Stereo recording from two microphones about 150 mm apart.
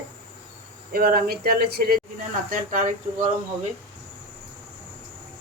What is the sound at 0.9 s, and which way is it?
Speech, 85° right.